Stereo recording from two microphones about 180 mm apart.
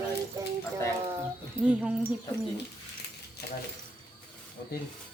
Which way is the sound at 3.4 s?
65° left (ahead or behind).